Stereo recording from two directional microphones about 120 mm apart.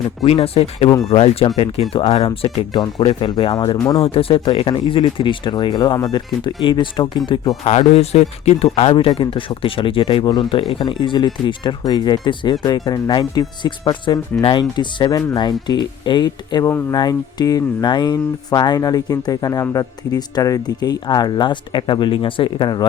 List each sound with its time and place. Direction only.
0.3 s speech: 55° left (ahead or behind); by 4.0 s 30° left (ahead or behind)
4.0 s speech: 50° left (ahead or behind)
7.7 s speech: 65° left (ahead or behind); by 22.9 s 40° left (ahead or behind)